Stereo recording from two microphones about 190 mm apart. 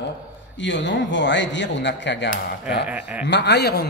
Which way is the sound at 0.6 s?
70° left (ahead or behind).